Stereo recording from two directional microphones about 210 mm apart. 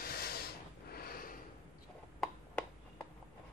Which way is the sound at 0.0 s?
45° left (ahead or behind).